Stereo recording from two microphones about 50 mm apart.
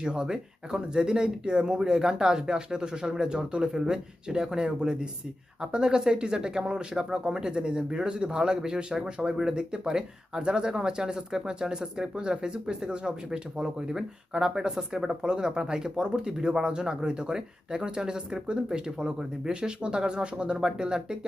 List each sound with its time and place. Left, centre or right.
0.0 s speech: centre